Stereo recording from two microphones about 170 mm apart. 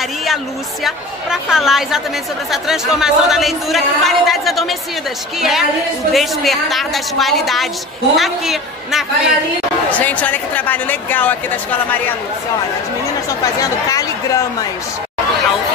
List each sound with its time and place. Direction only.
0.8 s speech: centre (ahead or behind)
9.8 s speech: 10° left (ahead or behind)
13.3 s speech: 20° left (ahead or behind)